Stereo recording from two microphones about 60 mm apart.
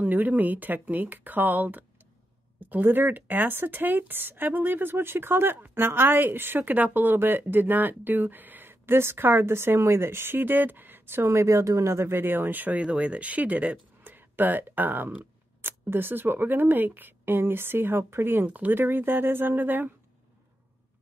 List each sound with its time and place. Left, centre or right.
0.0 s speech: right
11.2 s speech: right